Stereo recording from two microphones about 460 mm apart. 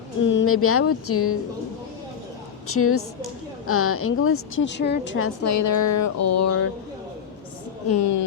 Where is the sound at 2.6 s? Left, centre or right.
Left.